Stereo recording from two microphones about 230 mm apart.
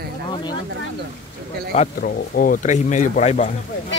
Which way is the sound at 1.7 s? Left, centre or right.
Left.